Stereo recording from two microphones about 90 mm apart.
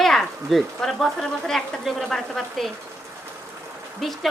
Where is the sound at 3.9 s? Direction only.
Centre (ahead or behind).